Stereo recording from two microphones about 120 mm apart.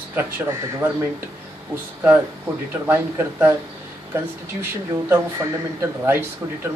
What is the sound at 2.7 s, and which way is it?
Speech, 20° right (ahead or behind).